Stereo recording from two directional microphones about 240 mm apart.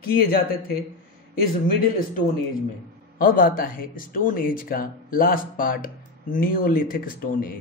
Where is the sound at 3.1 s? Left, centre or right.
Left.